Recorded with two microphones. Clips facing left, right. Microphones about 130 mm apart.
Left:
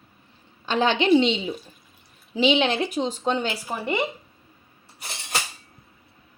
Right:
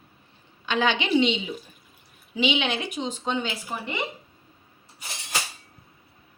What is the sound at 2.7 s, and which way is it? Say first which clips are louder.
Speech: left 5 dB; 45° left (ahead or behind).